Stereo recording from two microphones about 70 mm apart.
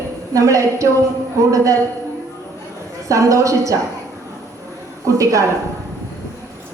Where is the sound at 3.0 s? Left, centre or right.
Right.